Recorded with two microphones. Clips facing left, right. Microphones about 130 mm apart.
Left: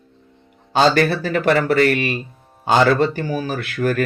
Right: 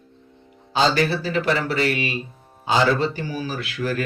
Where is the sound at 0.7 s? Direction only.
60° left (ahead or behind).